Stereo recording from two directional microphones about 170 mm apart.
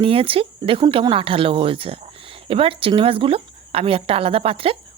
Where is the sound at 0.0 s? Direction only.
35° right (ahead or behind).